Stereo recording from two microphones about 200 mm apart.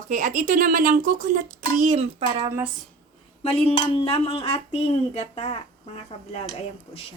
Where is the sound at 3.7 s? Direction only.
30° left (ahead or behind).